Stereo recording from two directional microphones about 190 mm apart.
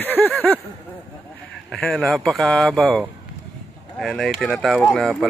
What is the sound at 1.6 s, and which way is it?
Speech, centre (ahead or behind).